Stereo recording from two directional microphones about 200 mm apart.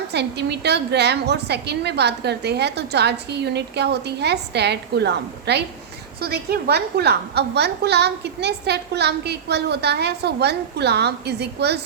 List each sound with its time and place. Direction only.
0.1 s a woman's voice: 55° right (ahead or behind)